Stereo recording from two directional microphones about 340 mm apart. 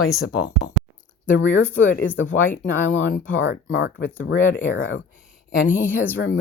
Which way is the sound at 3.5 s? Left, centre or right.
Left.